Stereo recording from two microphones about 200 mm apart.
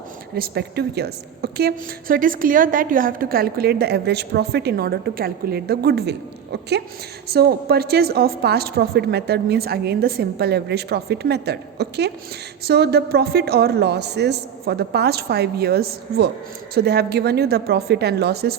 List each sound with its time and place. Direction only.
0.3 s a woman's voice: 50° right (ahead or behind)